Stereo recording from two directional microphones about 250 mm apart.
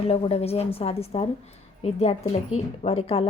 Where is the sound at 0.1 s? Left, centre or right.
Left.